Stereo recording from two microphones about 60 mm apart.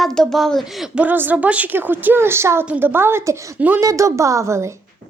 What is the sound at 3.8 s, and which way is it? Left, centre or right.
Speech, right.